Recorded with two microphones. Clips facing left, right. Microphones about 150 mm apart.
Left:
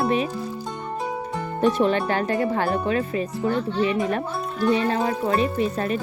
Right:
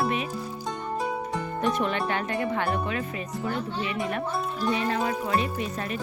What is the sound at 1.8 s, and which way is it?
Speech, 35° left (ahead or behind).